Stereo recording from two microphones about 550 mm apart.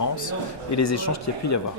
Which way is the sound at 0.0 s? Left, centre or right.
Left.